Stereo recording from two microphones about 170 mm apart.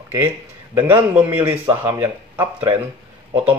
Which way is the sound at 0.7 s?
10° right (ahead or behind).